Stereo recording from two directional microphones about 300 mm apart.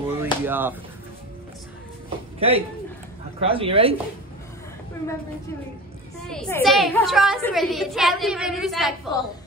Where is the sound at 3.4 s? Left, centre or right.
Centre.